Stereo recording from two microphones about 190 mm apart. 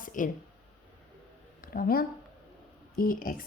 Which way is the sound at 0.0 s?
45° left (ahead or behind).